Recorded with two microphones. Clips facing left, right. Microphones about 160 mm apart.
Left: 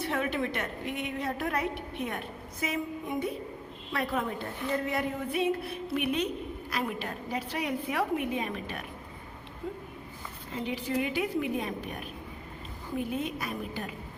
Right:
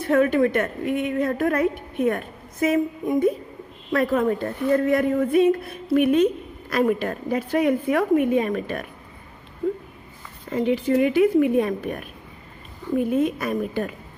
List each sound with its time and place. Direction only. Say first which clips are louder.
0.0 s a woman's voice: right 12 dB; 50° right (ahead or behind)
10.5 s a woman's voice: right 11 dB; 60° right (ahead or behind)